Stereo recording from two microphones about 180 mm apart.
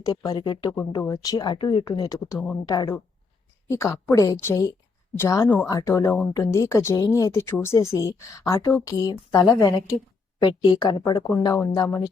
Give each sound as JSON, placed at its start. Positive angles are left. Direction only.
{"t": 0.0, "sound": "speech", "side_deg": 20}
{"t": 11.5, "sound": "speech", "side_deg": 10}